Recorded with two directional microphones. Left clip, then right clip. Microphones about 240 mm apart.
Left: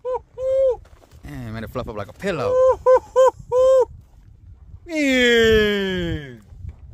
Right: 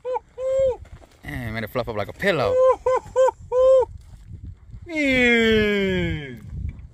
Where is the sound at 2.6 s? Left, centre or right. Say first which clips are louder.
Left 8 dB; centre.